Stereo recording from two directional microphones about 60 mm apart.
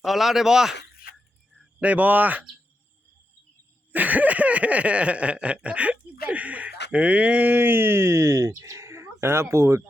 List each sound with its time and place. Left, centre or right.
0.0 s speech: centre
1.8 s speech: right
3.9 s a sound: right